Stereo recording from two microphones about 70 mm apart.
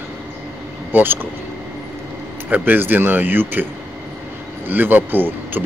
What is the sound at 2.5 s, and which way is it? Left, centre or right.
Speech, right.